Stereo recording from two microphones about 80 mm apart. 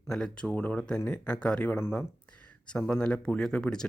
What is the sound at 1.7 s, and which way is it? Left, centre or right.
Speech, left.